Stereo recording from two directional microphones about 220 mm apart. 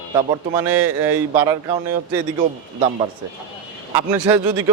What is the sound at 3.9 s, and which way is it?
Speech, 10° right (ahead or behind).